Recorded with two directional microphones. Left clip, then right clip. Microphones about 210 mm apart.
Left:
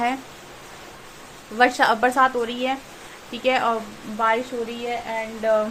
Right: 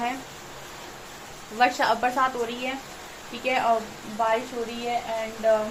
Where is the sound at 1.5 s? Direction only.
45° left (ahead or behind).